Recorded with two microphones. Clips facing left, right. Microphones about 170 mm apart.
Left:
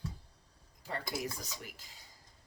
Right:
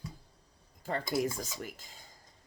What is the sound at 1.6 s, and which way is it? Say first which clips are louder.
Speech: right 7 dB; 45° right (ahead or behind).